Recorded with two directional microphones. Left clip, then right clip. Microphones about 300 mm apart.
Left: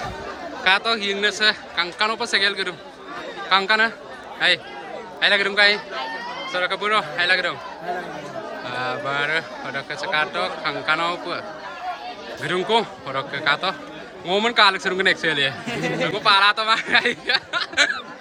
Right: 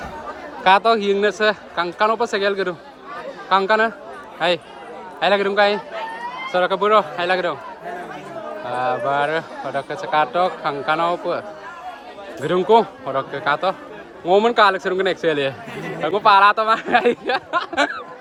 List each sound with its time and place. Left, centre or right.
0.6 s a man's voice: centre
8.7 s a man's voice: centre
12.5 s a man's voice: centre
15.7 s speech: centre
16.0 s a man's voice: centre